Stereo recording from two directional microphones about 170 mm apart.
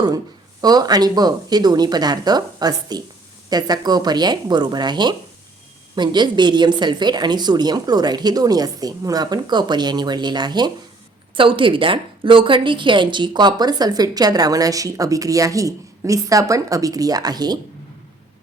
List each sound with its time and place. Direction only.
0.6 s a woman's voice: 25° right (ahead or behind)